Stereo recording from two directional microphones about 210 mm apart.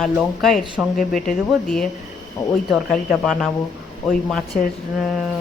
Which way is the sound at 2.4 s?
15° left (ahead or behind).